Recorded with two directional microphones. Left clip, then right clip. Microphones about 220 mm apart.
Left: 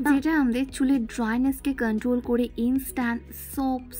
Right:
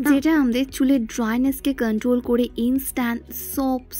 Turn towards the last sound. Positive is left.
turn(degrees=-15)  # may be behind; listen again after turning